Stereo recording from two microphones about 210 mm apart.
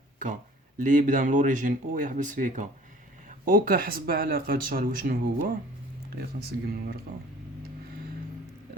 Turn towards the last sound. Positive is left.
turn(degrees=-45)  # may be behind; listen again after turning